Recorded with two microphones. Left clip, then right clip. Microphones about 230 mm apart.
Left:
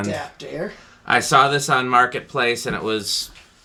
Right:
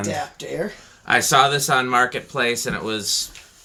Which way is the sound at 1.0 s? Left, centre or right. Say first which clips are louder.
Left 1 dB; centre.